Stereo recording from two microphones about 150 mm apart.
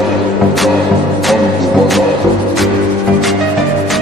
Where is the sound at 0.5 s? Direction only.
Centre (ahead or behind).